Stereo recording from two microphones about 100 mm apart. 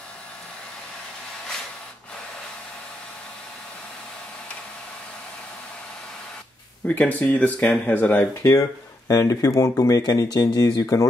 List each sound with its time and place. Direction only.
7.0 s speech: 15° left (ahead or behind)
8.5 s speech: 35° left (ahead or behind)